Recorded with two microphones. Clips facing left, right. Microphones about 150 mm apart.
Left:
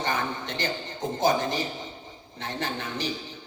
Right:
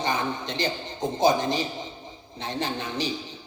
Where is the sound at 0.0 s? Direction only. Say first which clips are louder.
Right 2 dB; 15° right (ahead or behind).